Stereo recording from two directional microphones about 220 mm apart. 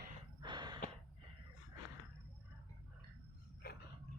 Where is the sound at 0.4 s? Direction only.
20° right (ahead or behind).